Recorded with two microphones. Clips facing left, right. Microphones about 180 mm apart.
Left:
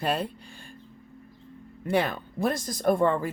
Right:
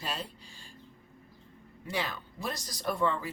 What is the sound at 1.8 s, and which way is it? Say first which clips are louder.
Speech: left 10 dB; 55° left (ahead or behind).